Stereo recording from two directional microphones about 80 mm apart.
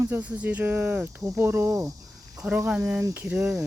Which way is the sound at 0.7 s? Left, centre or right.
Right.